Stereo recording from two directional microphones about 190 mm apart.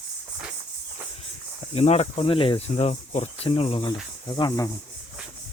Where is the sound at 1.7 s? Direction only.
35° left (ahead or behind); by 4.7 s 20° left (ahead or behind).